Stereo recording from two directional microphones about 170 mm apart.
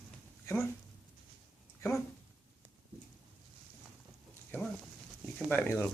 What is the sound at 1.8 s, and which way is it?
Speech, 15° left (ahead or behind).